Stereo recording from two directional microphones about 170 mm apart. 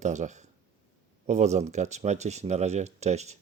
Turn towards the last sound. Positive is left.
turn(degrees=-40)  # may be behind; listen again after turning